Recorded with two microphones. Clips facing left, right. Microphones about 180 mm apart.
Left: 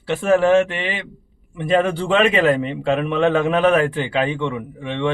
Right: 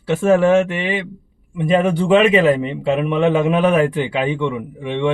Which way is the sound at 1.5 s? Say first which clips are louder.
Right 2 dB; 15° right (ahead or behind).